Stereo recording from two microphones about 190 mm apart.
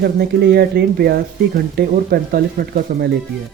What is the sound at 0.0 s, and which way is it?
Speech, 55° right (ahead or behind).